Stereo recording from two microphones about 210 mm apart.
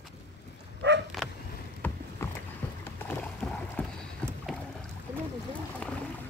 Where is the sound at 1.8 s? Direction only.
10° left (ahead or behind).